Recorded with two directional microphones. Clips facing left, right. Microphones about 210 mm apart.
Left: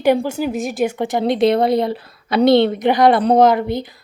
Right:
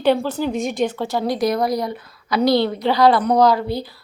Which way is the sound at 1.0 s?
20° left (ahead or behind).